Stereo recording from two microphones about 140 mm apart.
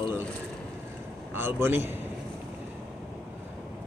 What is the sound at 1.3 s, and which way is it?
Speech, 15° right (ahead or behind).